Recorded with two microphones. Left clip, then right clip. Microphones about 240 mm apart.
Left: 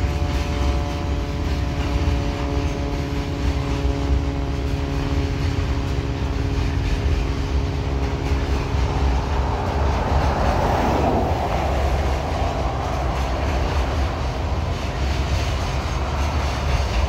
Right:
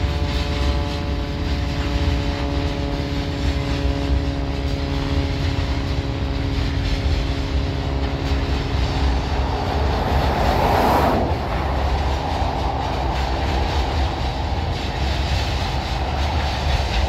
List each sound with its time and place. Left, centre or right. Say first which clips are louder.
10.4 s vehicle: right 5 dB; right